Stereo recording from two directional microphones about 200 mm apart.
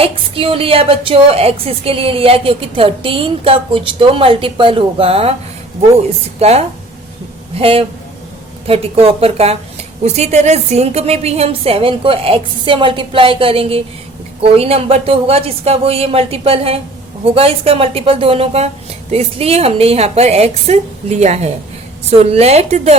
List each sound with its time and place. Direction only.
0.0 s a woman's voice: 25° right (ahead or behind)
6.4 s a woman's voice: 30° right (ahead or behind)